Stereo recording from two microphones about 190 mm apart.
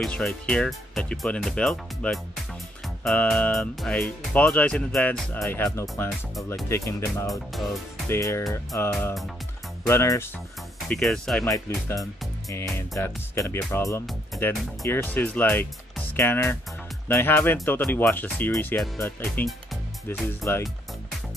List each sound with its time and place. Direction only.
0.0 s speech: 5° left (ahead or behind)
7.2 s speech: centre (ahead or behind)
8.1 s speech: 15° left (ahead or behind)
10.9 s speech: centre (ahead or behind)
11.4 s speech: 15° left (ahead or behind)